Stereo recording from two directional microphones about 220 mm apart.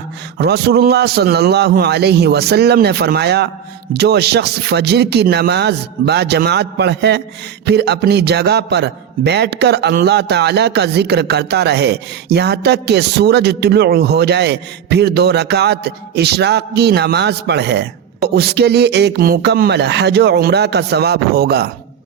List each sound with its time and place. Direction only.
0.3 s a man's voice: 50° right (ahead or behind)